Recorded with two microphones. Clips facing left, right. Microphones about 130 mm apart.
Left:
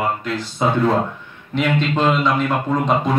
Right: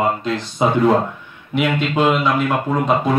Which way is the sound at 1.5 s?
10° right (ahead or behind).